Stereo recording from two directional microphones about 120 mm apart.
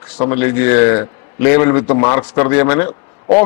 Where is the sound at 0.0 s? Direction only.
25° left (ahead or behind).